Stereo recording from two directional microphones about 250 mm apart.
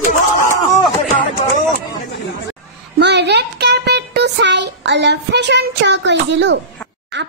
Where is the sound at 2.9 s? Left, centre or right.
Right.